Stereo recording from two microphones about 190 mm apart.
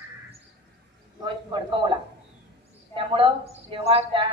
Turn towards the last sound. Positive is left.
turn(degrees=-30)  # may be behind; listen again after turning